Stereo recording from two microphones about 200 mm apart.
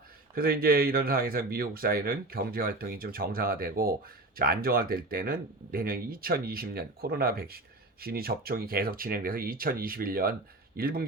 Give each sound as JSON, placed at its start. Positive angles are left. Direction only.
{"t": 0.3, "sound": "speech", "side_deg": -50}